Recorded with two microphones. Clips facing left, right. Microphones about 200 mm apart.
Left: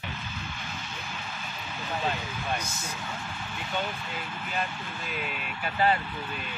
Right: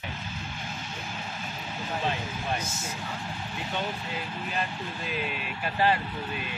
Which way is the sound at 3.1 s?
35° right (ahead or behind).